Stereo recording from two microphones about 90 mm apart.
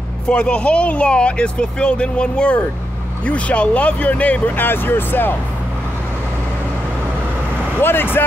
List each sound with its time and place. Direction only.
0.3 s speech: 10° left (ahead or behind)
7.8 s speech: 25° left (ahead or behind)